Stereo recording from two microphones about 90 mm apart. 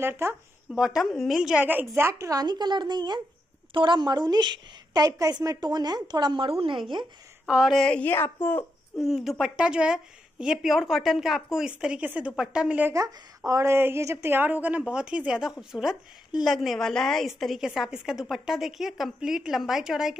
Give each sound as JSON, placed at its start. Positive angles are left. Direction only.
{"t": 0.0, "sound": "a woman's voice", "side_deg": -25}
{"t": 0.7, "sound": "a woman's voice", "side_deg": -5}
{"t": 1.6, "sound": "a woman's voice", "side_deg": -20}
{"t": 2.4, "sound": "a woman's voice", "side_deg": -55}
{"t": 7.4, "sound": "speech", "side_deg": -10}
{"t": 7.7, "sound": "a woman's voice", "side_deg": 10}
{"t": 8.1, "sound": "a woman's voice", "side_deg": 25}
{"t": 9.0, "sound": "a woman's voice", "side_deg": 0}
{"t": 13.5, "sound": "a woman's voice", "side_deg": -30}
{"t": 16.5, "sound": "a woman's voice", "side_deg": 5}